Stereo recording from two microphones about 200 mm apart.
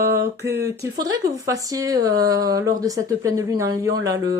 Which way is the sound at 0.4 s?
15° right (ahead or behind).